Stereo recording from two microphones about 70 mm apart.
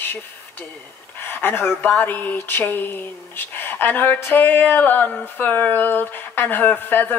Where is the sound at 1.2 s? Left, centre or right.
Left.